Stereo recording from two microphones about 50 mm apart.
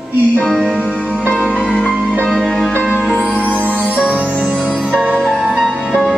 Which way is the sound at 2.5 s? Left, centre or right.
Centre.